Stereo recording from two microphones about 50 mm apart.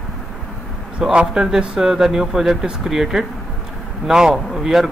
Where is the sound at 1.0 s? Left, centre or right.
Centre.